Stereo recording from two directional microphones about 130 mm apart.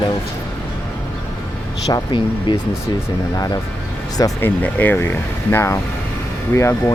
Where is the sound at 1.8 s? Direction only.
35° left (ahead or behind).